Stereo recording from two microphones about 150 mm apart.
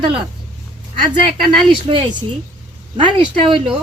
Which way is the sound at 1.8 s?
35° right (ahead or behind).